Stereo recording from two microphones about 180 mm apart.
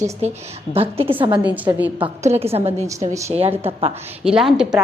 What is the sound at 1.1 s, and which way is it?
Speech, 30° right (ahead or behind).